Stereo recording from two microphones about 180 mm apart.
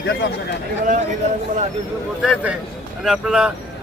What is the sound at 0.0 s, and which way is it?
Speech, 70° left (ahead or behind).